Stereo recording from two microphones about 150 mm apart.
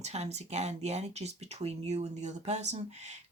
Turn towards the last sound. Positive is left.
turn(degrees=-50)  # may be behind; listen again after turning